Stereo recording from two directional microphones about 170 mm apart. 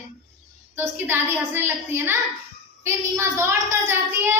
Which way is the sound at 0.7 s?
10° right (ahead or behind).